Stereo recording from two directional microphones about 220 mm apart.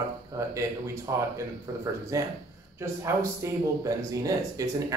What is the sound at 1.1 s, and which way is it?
Speech, 15° right (ahead or behind).